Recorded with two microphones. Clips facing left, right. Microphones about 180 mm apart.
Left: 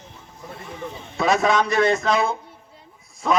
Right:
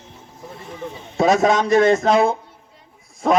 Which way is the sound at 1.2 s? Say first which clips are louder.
Right 4 dB; 45° right (ahead or behind).